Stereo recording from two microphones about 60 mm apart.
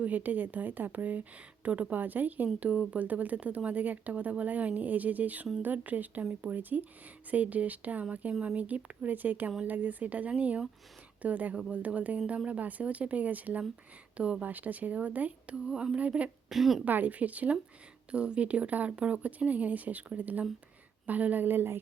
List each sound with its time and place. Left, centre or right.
0.0 s speech: right
14.2 s a sound: centre
14.4 s speech: right
15.5 s a sound: centre
16.0 s speech: right
16.5 s a woman's voice: centre
16.8 s speech: right